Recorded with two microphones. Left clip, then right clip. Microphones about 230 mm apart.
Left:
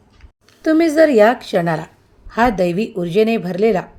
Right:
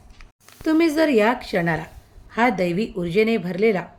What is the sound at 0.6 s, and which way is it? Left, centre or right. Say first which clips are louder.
A woman's voice: left 6 dB; centre.